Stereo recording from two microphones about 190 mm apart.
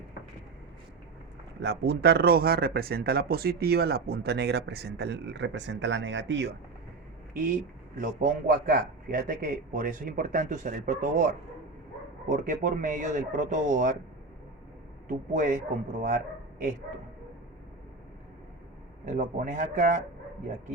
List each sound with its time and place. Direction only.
1.6 s speech: 60° right (ahead or behind)
8.0 s a man's voice: 45° right (ahead or behind)
15.0 s a man's voice: 45° right (ahead or behind)
19.0 s a man's voice: 45° right (ahead or behind)